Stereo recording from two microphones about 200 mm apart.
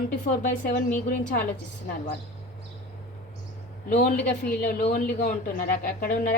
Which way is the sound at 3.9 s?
35° left (ahead or behind).